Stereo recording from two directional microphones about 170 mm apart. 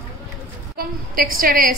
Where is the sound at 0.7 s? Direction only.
60° right (ahead or behind).